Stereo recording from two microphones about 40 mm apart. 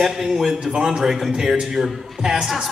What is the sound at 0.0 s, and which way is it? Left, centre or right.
Speech, centre.